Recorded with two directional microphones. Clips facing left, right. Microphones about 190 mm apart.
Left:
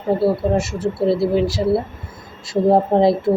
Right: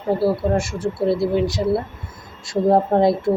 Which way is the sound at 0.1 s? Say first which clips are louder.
Left 2 dB; centre (ahead or behind).